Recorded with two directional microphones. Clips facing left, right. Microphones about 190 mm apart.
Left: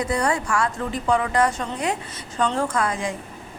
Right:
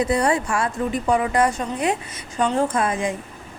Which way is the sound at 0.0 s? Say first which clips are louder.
Right 3 dB; 25° right (ahead or behind).